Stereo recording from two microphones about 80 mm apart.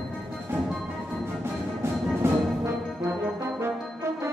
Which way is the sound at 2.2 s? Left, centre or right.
Right.